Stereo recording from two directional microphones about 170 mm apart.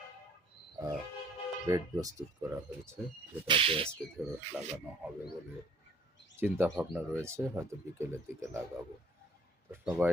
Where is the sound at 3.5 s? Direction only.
30° right (ahead or behind).